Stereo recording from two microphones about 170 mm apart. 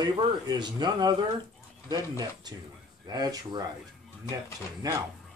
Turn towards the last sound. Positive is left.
turn(degrees=-20)  # may be behind; listen again after turning